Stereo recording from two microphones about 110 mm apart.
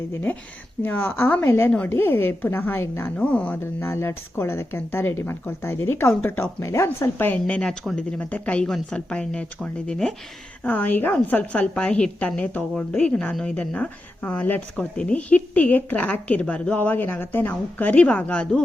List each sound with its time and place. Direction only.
0.1 s a woman's voice: 15° left (ahead or behind)